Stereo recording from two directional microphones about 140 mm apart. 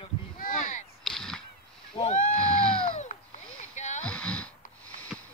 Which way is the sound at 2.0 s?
35° left (ahead or behind).